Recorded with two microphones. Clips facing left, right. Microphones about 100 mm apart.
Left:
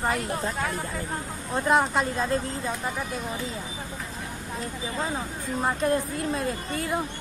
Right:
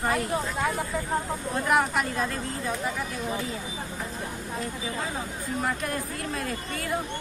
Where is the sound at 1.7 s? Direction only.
25° left (ahead or behind).